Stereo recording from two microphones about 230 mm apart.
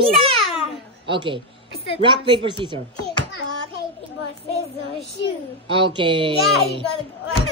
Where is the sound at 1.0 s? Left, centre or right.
Right.